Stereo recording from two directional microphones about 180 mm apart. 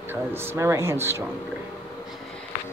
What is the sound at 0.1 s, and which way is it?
Speech, 15° right (ahead or behind).